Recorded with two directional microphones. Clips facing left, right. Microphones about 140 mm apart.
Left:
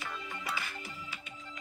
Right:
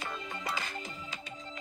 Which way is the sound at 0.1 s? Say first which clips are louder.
Right 2 dB; 25° right (ahead or behind).